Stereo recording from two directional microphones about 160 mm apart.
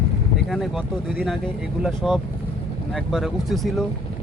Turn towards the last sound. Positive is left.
turn(degrees=0)  # may be behind; listen again after turning